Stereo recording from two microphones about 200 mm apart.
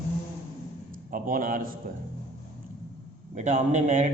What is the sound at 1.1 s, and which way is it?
Speech, 45° right (ahead or behind).